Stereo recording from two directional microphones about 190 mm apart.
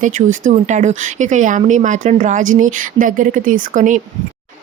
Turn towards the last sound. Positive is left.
turn(degrees=-40)  # may be behind; listen again after turning